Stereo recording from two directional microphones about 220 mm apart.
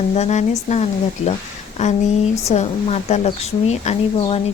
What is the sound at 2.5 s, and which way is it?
A woman's voice, 30° left (ahead or behind).